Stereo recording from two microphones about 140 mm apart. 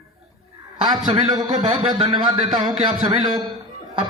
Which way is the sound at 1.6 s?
45° right (ahead or behind).